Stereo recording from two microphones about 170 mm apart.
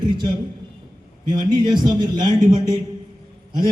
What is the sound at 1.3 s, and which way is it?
Speech, 25° right (ahead or behind).